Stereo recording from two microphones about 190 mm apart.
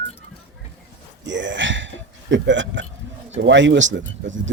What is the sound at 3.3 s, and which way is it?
Speech, 75° right (ahead or behind).